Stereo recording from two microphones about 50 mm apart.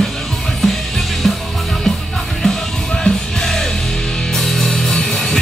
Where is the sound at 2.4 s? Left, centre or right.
Centre.